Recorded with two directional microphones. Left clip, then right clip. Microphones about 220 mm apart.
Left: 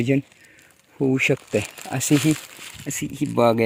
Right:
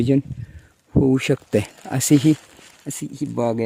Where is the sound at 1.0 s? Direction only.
25° right (ahead or behind).